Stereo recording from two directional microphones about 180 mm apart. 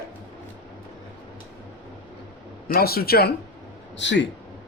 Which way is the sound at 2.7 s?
60° left (ahead or behind).